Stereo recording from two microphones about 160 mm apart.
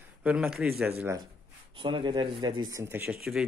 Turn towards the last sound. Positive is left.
turn(degrees=0)  # may be behind; listen again after turning